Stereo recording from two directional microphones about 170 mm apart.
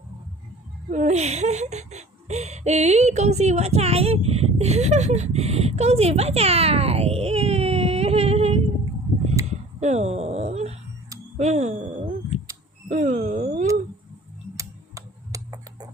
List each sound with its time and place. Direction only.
0.9 s speech: 45° right (ahead or behind)
9.8 s speech: 40° right (ahead or behind)
12.9 s a sound: 45° right (ahead or behind)
14.5 s tick: 20° right (ahead or behind)